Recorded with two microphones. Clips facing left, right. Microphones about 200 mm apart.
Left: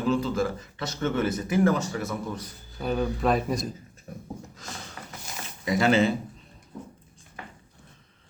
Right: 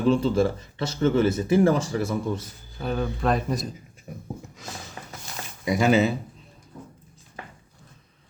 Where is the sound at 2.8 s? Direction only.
Centre (ahead or behind).